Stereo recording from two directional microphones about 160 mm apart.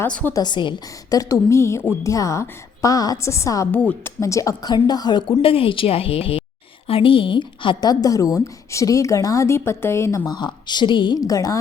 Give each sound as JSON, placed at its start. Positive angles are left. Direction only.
{"t": 0.0, "sound": "a woman's voice", "side_deg": 10}
{"t": 0.3, "sound": "a woman's voice", "side_deg": 30}